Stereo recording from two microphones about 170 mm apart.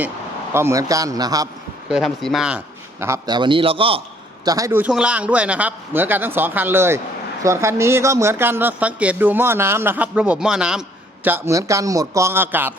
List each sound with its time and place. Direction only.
0.5 s a man's voice: 15° right (ahead or behind)
1.9 s speech: centre (ahead or behind)
3.0 s a man's voice: 20° right (ahead or behind)
4.4 s speech: 20° right (ahead or behind)